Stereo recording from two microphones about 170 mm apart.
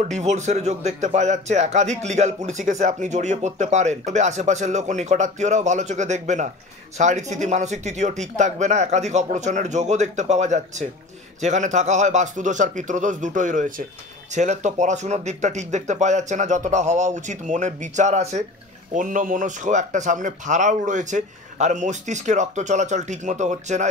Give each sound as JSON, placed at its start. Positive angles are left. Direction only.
{"t": 0.1, "sound": "a man's voice", "side_deg": -40}